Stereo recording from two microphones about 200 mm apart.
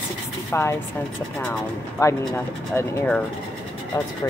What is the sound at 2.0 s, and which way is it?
Speech, 15° left (ahead or behind).